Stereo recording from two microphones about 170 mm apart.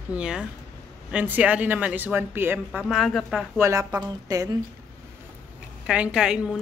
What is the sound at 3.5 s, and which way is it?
Speech, 15° right (ahead or behind).